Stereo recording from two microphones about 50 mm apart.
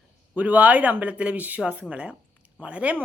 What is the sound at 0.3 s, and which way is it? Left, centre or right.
A woman's voice, right.